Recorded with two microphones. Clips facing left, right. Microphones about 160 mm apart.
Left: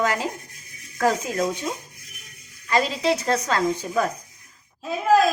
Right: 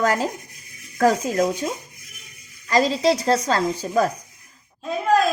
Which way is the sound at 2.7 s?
35° right (ahead or behind).